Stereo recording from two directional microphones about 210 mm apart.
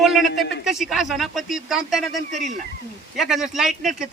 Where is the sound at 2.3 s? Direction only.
35° right (ahead or behind).